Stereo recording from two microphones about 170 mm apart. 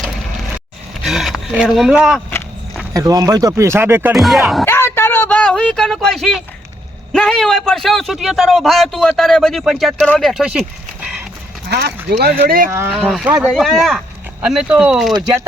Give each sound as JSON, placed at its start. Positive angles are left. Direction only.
{"t": 1.0, "sound": "speech", "side_deg": 0}
{"t": 2.9, "sound": "speech", "side_deg": -20}
{"t": 4.1, "sound": "a man's voice", "side_deg": 0}
{"t": 4.6, "sound": "a sound", "side_deg": 15}
{"t": 7.1, "sound": "a man's voice", "side_deg": 5}
{"t": 12.1, "sound": "speech", "side_deg": -70}
{"t": 12.9, "sound": "a man's voice", "side_deg": 0}